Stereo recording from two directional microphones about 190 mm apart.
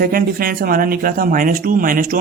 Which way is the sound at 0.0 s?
50° right (ahead or behind).